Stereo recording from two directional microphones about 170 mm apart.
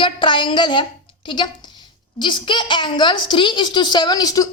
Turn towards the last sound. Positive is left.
turn(degrees=20)  # may be behind; listen again after turning